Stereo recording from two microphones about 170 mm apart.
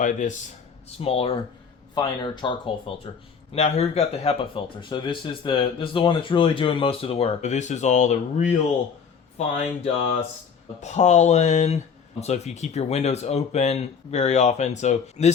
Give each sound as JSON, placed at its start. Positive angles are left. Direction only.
{"t": 0.0, "sound": "speech", "side_deg": 45}
{"t": 0.9, "sound": "speech", "side_deg": 35}
{"t": 3.5, "sound": "speech", "side_deg": 40}
{"t": 9.6, "sound": "speech", "side_deg": 40}